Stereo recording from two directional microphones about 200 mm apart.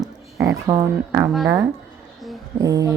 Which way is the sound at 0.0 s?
20° right (ahead or behind).